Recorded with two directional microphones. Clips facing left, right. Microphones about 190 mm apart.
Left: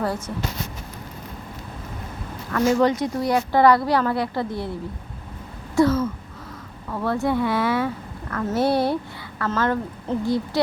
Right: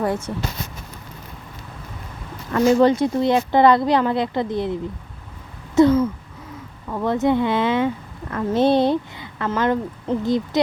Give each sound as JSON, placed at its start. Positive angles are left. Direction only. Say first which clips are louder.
{"t": 0.0, "sound": "speech", "louder": "right 3 dB", "side_deg": -20}
{"t": 2.5, "sound": "speech", "louder": "right 4 dB", "side_deg": -25}
{"t": 5.7, "sound": "speech", "louder": "right 4 dB", "side_deg": -20}